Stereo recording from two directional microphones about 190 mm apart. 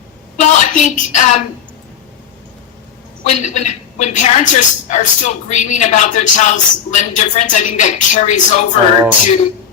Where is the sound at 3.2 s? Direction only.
40° left (ahead or behind).